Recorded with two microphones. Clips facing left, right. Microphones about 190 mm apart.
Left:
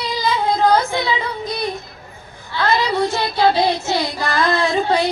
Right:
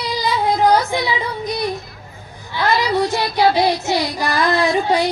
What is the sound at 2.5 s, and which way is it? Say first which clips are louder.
Speech: even; 15° right (ahead or behind).